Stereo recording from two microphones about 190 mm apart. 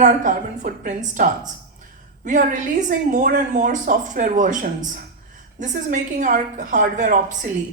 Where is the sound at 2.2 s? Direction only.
40° right (ahead or behind).